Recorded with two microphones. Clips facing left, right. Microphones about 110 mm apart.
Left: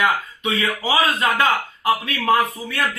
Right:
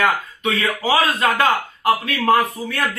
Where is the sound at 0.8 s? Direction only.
35° right (ahead or behind).